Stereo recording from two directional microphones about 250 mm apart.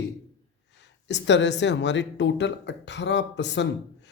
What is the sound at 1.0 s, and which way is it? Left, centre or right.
Speech, left.